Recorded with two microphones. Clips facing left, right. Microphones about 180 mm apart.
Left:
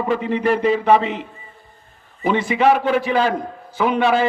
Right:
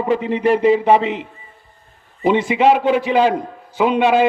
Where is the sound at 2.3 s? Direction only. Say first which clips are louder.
Right 2 dB; 20° right (ahead or behind).